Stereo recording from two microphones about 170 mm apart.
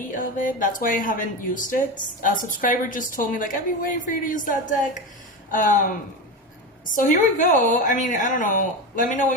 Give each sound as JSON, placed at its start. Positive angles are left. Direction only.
{"t": 0.1, "sound": "speech", "side_deg": 50}
{"t": 6.9, "sound": "speech", "side_deg": 50}